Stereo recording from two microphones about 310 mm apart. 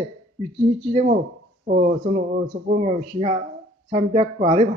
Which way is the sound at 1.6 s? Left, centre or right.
Right.